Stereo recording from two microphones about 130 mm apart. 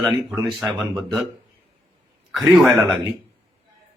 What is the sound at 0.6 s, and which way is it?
Speech, 5° right (ahead or behind).